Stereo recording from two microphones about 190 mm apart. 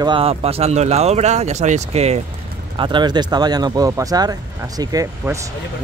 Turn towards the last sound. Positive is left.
turn(degrees=-20)  # may be behind; listen again after turning